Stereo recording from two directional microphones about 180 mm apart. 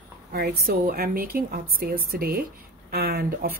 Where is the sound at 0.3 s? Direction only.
55° right (ahead or behind).